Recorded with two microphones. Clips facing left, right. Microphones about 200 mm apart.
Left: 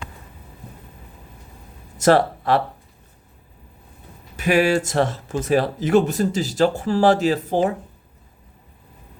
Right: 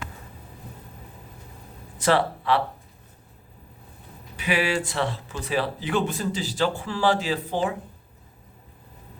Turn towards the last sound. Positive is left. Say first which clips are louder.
# left 7 dB
turn(degrees=45)  # may be behind; listen again after turning